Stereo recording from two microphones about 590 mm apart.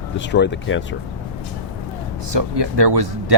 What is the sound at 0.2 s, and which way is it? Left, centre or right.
Speech, centre.